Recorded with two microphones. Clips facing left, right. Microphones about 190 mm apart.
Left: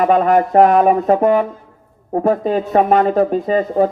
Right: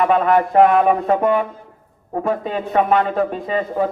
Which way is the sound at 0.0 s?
40° left (ahead or behind).